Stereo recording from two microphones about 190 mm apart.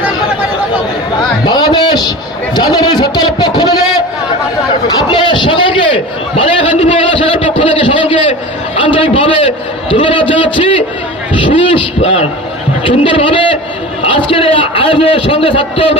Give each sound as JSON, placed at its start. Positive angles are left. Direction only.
{"t": 1.4, "sound": "a man's voice", "side_deg": 25}
{"t": 5.0, "sound": "a sound", "side_deg": 25}
{"t": 8.8, "sound": "a man's voice", "side_deg": 30}